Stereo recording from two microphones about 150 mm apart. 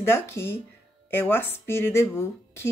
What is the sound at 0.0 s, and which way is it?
Speech, 15° left (ahead or behind).